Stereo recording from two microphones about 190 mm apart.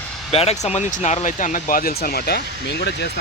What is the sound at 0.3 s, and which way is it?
Speech, 30° left (ahead or behind).